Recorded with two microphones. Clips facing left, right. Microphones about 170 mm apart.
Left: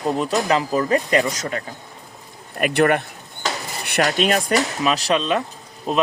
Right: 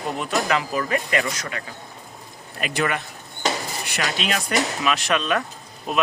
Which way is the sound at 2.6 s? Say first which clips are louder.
Left 7 dB; 55° left (ahead or behind).